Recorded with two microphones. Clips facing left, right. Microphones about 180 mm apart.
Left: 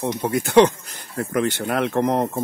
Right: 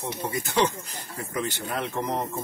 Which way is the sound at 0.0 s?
80° left.